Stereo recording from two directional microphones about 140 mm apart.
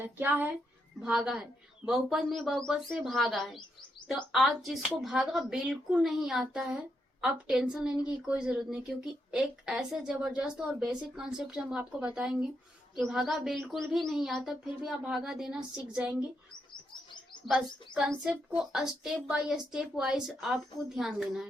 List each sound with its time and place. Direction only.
0.0 s a woman's voice: 15° right (ahead or behind)
18.1 s a woman's voice: centre (ahead or behind)